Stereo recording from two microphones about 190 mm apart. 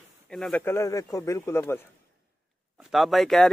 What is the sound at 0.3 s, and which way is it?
Speech, 5° left (ahead or behind).